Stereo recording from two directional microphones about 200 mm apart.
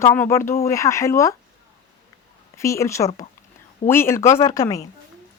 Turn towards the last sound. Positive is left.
turn(degrees=15)  # may be behind; listen again after turning